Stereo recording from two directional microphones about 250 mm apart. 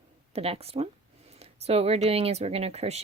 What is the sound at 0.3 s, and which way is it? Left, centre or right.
Speech, right.